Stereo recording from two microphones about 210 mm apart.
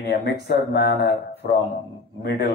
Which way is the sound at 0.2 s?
55° left (ahead or behind).